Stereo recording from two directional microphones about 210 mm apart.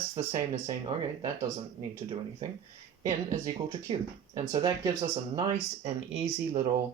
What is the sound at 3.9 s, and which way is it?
Speech, 25° right (ahead or behind).